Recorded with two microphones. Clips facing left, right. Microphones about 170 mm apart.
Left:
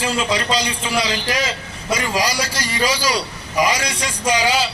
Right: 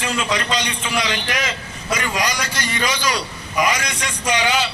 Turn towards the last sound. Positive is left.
turn(degrees=35)  # may be behind; listen again after turning